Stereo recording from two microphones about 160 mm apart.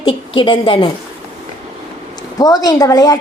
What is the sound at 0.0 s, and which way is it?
Speech, 30° left (ahead or behind).